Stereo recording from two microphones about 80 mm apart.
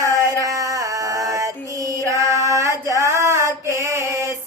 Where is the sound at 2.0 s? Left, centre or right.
Right.